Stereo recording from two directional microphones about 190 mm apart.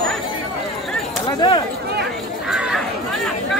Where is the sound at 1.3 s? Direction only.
25° left (ahead or behind).